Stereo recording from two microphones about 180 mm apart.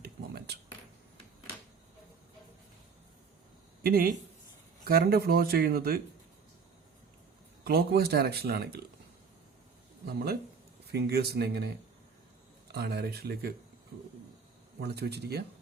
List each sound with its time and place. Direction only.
0.0 s a sound: 65° right (ahead or behind)
3.8 s speech: 55° right (ahead or behind)
7.6 s speech: 60° right (ahead or behind)
10.9 s speech: 65° right (ahead or behind)
14.8 s speech: 65° right (ahead or behind)